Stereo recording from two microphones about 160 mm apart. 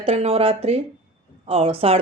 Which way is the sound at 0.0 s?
35° right (ahead or behind).